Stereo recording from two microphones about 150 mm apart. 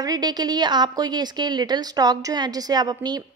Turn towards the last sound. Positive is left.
turn(degrees=-25)  # may be behind; listen again after turning